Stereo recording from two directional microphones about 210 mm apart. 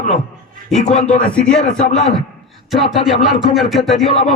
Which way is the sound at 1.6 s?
35° left (ahead or behind).